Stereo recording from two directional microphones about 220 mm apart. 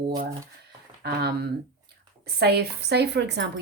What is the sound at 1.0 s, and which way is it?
Speech, 45° right (ahead or behind).